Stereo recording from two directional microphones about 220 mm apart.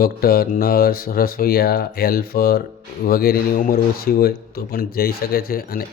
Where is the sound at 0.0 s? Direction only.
45° left (ahead or behind).